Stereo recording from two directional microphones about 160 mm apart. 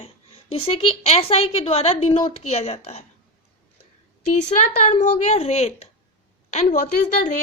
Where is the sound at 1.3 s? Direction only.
40° left (ahead or behind).